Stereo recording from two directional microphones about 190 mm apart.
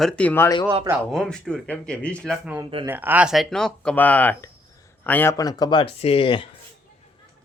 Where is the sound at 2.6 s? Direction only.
30° right (ahead or behind).